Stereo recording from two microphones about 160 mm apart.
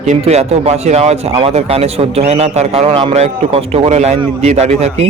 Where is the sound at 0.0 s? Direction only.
45° right (ahead or behind).